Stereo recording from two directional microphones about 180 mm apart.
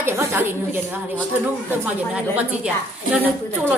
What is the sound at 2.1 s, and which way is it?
Speech, 5° right (ahead or behind).